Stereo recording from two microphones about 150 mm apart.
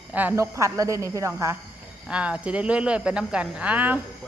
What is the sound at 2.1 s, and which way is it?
A woman's voice, 5° right (ahead or behind).